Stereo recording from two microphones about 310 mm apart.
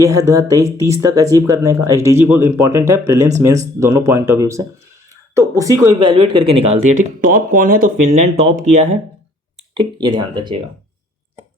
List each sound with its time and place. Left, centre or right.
0.0 s speech: centre